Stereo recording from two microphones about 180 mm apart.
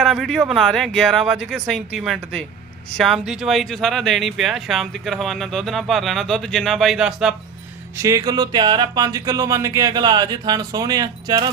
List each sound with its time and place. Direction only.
0.0 s speech: centre (ahead or behind)
8.0 s speech: 20° right (ahead or behind)